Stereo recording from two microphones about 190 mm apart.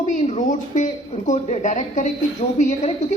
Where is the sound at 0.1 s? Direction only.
40° left (ahead or behind).